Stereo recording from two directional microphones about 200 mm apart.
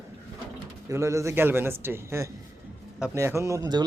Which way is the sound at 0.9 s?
15° right (ahead or behind).